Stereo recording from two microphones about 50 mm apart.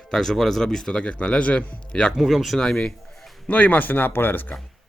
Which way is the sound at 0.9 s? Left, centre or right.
Left.